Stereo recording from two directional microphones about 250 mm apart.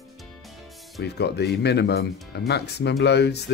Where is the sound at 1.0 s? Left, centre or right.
Left.